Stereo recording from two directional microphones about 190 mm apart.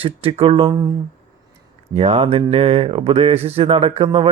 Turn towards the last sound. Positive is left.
turn(degrees=-30)  # may be behind; listen again after turning